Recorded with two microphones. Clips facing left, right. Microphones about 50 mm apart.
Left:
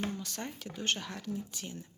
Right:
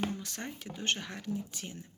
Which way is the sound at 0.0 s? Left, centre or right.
Right.